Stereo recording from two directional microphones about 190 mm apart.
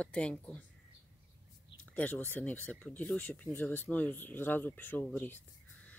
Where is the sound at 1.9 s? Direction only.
10° left (ahead or behind).